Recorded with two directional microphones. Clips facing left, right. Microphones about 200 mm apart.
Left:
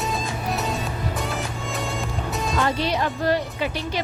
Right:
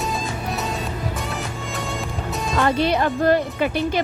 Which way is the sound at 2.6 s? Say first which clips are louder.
Right 4 dB; 55° right (ahead or behind).